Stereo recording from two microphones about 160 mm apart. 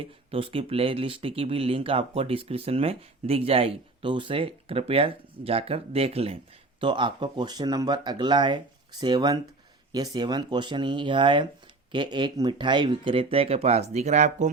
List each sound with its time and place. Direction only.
0.0 s speech: 35° right (ahead or behind)